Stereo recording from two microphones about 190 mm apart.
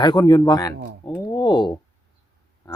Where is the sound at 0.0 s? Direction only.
20° left (ahead or behind).